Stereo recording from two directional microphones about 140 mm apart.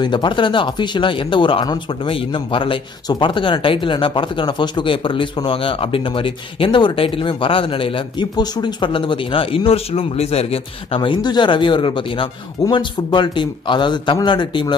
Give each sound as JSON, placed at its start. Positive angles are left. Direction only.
{"t": 0.0, "sound": "speech", "side_deg": 35}